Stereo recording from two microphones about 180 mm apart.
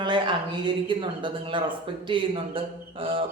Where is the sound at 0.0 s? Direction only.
25° right (ahead or behind).